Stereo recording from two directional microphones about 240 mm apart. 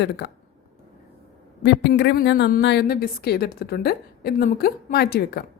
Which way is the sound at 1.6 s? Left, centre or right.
Left.